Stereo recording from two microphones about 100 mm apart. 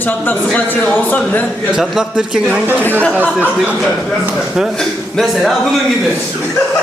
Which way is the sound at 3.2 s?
20° right (ahead or behind).